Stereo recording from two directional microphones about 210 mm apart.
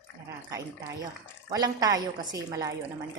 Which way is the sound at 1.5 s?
20° right (ahead or behind).